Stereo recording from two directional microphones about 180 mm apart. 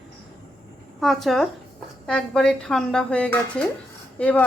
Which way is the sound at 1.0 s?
Centre (ahead or behind).